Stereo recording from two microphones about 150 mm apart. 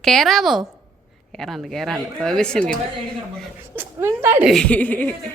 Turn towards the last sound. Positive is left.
turn(degrees=10)  # may be behind; listen again after turning